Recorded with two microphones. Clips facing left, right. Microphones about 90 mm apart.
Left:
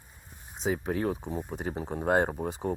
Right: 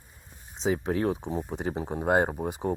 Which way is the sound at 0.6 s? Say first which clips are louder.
Right 3 dB; 10° left (ahead or behind).